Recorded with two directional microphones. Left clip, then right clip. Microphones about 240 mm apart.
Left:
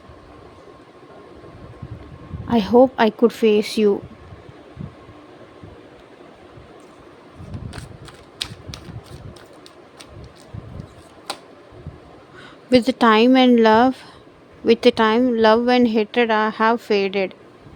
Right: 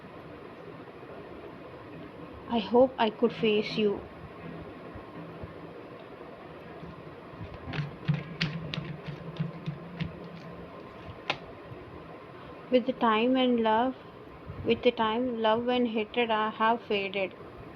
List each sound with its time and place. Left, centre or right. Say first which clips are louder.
2.5 s speech: left 9 dB; left
12.7 s speech: left 11 dB; left